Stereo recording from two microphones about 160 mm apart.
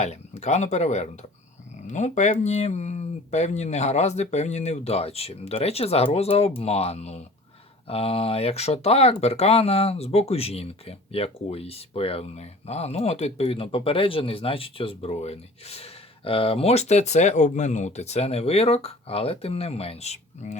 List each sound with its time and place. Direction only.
0.0 s speech: 45° left (ahead or behind)